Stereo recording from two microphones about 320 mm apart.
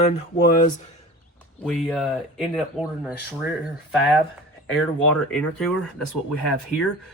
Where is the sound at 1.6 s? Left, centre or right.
Centre.